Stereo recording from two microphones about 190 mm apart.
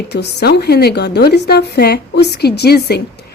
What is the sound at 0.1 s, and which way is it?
A woman's voice, 60° left (ahead or behind).